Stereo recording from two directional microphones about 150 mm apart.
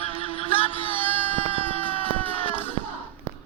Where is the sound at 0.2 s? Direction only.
40° left (ahead or behind).